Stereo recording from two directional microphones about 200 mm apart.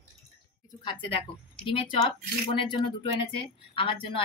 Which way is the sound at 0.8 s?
25° left (ahead or behind).